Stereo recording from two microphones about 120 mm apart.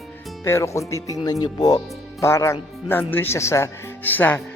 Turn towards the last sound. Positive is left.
turn(degrees=15)  # may be behind; listen again after turning